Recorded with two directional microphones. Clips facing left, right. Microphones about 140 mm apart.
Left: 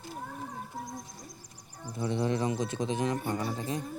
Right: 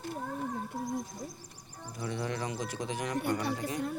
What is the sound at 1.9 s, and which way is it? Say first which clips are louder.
Speech: left 6 dB; 25° left (ahead or behind).